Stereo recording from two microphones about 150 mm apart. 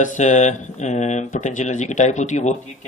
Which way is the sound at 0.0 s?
55° left (ahead or behind).